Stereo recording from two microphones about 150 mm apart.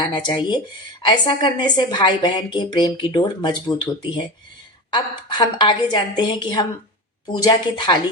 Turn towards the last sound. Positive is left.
turn(degrees=30)  # may be behind; listen again after turning